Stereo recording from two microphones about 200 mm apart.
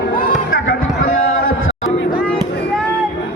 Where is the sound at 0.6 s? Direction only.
80° left.